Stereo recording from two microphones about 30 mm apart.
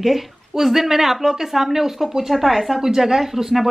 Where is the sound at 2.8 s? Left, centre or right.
Centre.